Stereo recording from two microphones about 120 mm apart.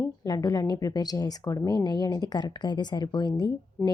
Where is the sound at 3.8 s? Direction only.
15° left (ahead or behind).